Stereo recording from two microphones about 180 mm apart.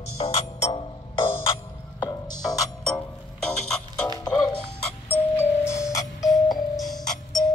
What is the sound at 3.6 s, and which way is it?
Music, 5° left (ahead or behind).